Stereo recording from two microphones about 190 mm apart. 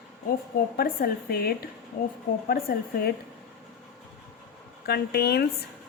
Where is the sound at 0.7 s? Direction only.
55° left (ahead or behind).